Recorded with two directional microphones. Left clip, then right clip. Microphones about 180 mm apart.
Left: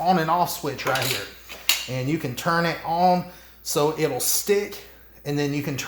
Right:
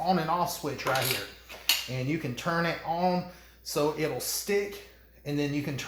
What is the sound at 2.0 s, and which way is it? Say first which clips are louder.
Speech: left 9 dB; 40° left (ahead or behind).